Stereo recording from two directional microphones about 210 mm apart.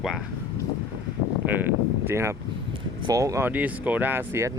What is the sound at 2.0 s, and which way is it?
Speech, 10° right (ahead or behind).